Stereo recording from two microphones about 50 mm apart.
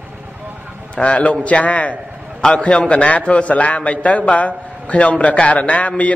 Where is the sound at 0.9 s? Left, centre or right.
Left.